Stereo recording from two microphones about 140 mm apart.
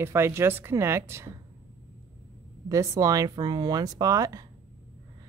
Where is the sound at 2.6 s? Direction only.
25° right (ahead or behind).